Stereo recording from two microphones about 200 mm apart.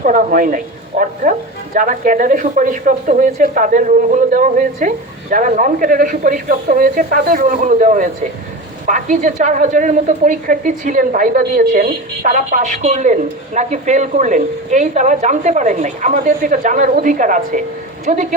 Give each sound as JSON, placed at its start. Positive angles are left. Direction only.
{"t": 0.0, "sound": "a woman's voice", "side_deg": -40}